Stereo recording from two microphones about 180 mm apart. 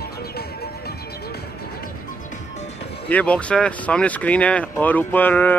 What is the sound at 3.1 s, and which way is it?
Speech, 5° left (ahead or behind).